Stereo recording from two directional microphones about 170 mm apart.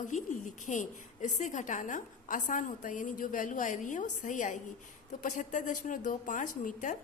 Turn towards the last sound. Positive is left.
turn(degrees=50)  # may be behind; listen again after turning